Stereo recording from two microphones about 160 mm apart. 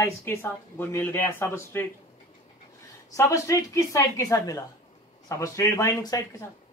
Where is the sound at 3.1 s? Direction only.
20° left (ahead or behind).